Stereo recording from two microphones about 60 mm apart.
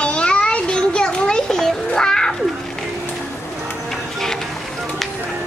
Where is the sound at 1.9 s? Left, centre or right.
Centre.